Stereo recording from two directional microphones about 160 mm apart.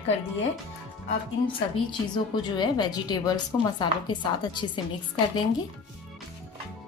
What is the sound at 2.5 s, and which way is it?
A woman's voice, 25° left (ahead or behind).